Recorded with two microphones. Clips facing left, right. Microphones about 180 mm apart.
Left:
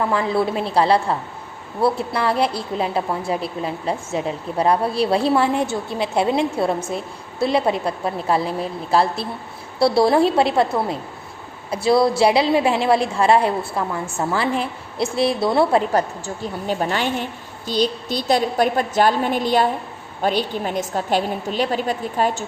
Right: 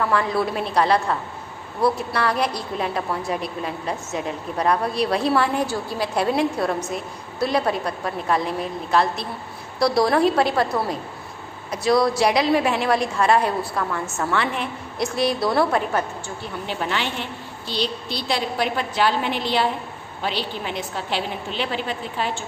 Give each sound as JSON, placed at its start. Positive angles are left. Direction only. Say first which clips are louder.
{"t": 0.0, "sound": "a woman's voice", "louder": "left 2 dB", "side_deg": 25}